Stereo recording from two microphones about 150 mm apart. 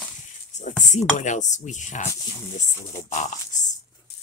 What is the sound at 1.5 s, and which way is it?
Speech, 55° left (ahead or behind).